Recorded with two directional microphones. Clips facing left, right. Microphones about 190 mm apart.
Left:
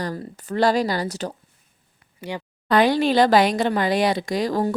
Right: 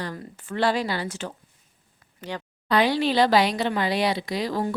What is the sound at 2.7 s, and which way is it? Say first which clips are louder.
Speech: left 4 dB; 45° left (ahead or behind).